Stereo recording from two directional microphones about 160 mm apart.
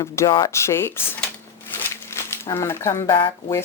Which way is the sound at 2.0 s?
15° left (ahead or behind).